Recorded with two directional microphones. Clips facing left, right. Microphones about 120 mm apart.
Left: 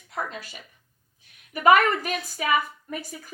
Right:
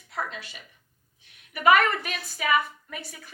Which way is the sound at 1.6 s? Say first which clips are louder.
Left 2 dB; 40° left (ahead or behind).